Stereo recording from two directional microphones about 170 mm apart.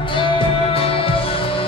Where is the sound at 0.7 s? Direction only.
35° left (ahead or behind).